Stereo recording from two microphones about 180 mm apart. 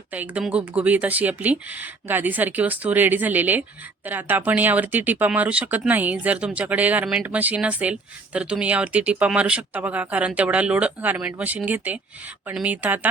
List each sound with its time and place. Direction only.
0.1 s speech: 10° right (ahead or behind)